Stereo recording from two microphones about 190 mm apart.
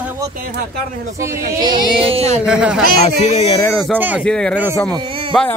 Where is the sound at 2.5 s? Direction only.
5° right (ahead or behind).